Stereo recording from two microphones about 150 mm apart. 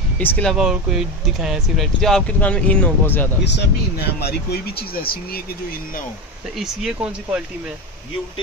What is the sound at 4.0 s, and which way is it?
Speech, 90° left.